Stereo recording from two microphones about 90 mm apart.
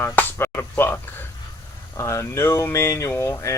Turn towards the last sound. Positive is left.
turn(degrees=30)  # may be behind; listen again after turning